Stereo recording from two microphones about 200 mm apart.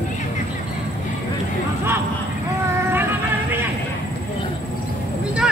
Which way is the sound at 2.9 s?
10° right (ahead or behind).